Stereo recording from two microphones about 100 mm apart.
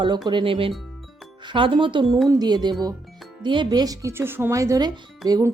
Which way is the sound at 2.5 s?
50° right (ahead or behind).